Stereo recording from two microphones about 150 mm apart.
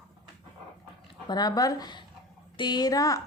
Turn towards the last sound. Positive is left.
turn(degrees=25)  # may be behind; listen again after turning